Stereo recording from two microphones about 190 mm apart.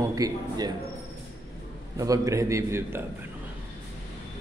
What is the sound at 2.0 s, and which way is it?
A man's voice, 15° right (ahead or behind).